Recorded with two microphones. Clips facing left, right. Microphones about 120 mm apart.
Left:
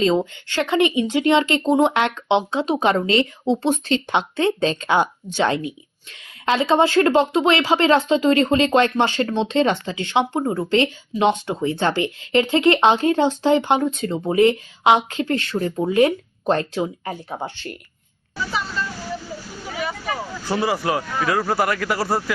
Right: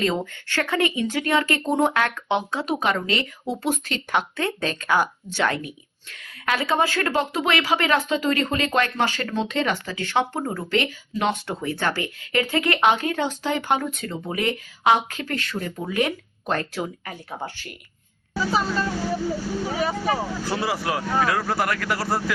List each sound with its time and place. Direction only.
0.0 s speech: 20° left (ahead or behind)
18.5 s speech: 40° right (ahead or behind)
20.5 s speech: centre (ahead or behind)